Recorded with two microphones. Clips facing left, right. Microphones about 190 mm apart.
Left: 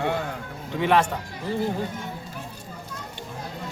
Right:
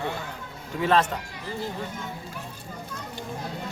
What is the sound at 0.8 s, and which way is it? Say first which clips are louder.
Speech: left 1 dB; 15° left (ahead or behind).